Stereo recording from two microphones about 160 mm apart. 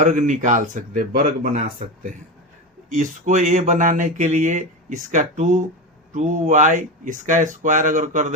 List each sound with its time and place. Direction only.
0.0 s speech: 50° right (ahead or behind)
2.9 s speech: 55° right (ahead or behind)